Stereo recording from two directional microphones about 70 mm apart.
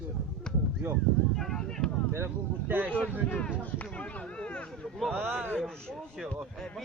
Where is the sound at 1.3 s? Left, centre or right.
Centre.